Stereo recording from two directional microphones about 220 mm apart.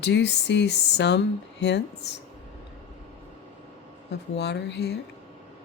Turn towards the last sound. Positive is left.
turn(degrees=50)  # may be behind; listen again after turning